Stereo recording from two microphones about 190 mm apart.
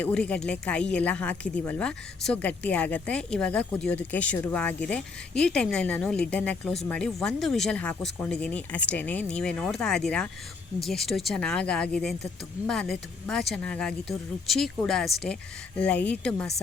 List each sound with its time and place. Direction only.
0.0 s speech: 5° left (ahead or behind)